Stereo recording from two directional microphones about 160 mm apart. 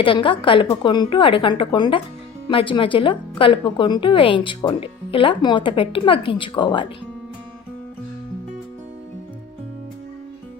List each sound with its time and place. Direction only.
0.0 s a woman's voice: 30° left (ahead or behind)